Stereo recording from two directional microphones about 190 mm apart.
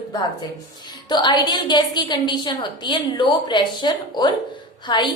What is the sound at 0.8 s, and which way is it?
A woman's voice, 25° left (ahead or behind).